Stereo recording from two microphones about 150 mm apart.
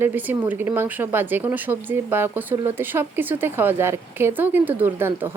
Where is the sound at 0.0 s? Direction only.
10° right (ahead or behind).